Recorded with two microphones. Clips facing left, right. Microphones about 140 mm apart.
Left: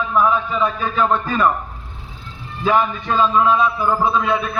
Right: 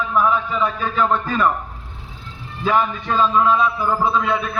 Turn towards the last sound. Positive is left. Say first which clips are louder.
# left 1 dB
turn(degrees=15)  # may be behind; listen again after turning